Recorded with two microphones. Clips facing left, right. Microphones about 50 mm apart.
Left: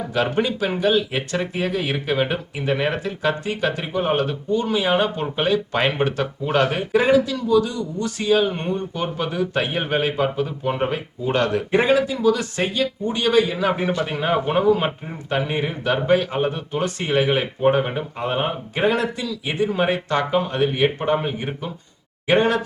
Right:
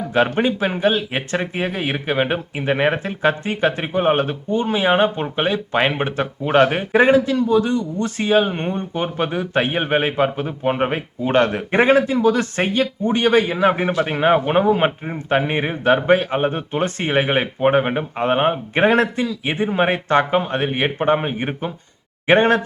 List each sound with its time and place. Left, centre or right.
0.3 s speech: right